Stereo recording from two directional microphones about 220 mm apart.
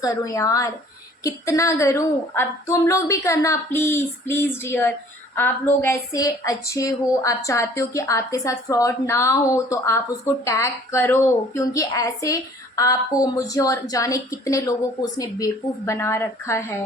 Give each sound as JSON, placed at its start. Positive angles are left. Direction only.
{"t": 0.0, "sound": "speech", "side_deg": 15}
{"t": 15.9, "sound": "speech", "side_deg": 10}